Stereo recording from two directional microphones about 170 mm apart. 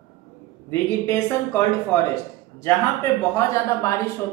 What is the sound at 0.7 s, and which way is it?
Speech, 15° left (ahead or behind).